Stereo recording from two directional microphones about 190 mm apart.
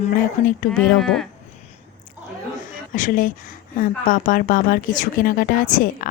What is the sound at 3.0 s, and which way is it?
Speech, 45° left (ahead or behind).